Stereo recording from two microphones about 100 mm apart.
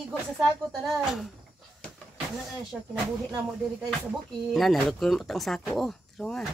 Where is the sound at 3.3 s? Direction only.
40° right (ahead or behind).